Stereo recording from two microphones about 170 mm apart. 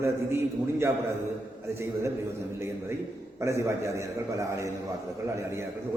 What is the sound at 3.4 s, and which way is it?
A man's voice, 15° right (ahead or behind).